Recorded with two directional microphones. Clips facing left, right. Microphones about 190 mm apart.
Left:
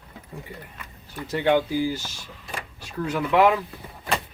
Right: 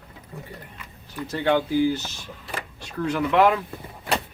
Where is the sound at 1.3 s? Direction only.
15° left (ahead or behind).